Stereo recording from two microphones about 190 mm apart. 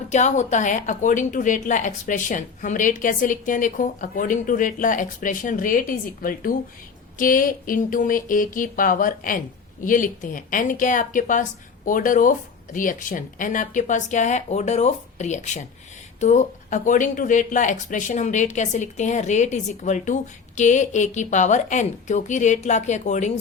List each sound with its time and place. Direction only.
0.1 s a woman's voice: 40° left (ahead or behind)